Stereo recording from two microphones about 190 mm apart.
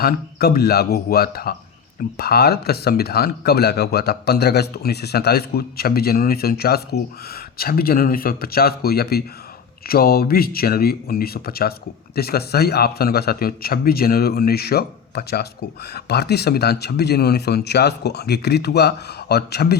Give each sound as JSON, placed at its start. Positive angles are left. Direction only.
{"t": 0.0, "sound": "a man's voice", "side_deg": 55}